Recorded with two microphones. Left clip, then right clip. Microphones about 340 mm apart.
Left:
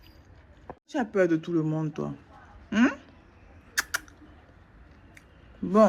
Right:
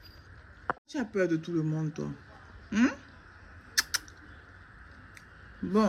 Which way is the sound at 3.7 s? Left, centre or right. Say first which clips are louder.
Left 1 dB; centre.